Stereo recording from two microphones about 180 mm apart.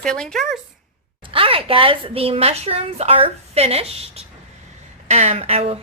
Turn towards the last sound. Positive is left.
turn(degrees=-35)  # may be behind; listen again after turning